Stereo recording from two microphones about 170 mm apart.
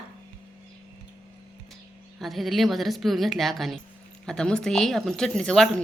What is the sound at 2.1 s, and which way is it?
A woman's voice, centre (ahead or behind).